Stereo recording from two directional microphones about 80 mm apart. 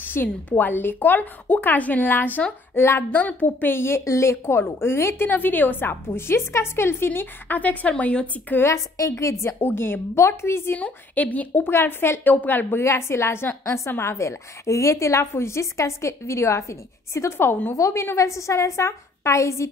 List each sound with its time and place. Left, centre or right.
0.0 s a woman's voice: left
8.5 s a woman's voice: left
10.8 s a woman's voice: centre
17.7 s a woman's voice: left